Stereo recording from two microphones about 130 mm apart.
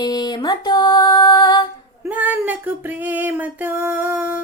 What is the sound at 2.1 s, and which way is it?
Female singing, 10° right (ahead or behind).